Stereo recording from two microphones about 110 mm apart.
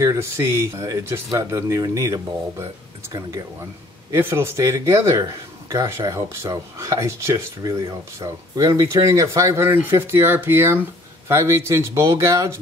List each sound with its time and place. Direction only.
0.0 s speech: 25° right (ahead or behind)